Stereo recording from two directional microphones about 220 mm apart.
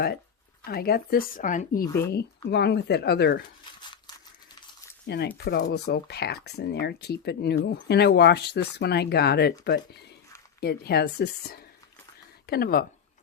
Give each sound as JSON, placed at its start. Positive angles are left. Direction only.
{"t": 0.6, "sound": "speech", "side_deg": 45}
{"t": 1.8, "sound": "speech", "side_deg": 15}
{"t": 2.0, "sound": "speech", "side_deg": 45}
{"t": 5.0, "sound": "speech", "side_deg": 45}